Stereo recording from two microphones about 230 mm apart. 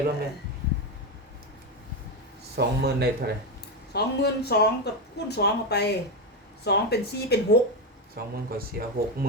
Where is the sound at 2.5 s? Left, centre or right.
Right.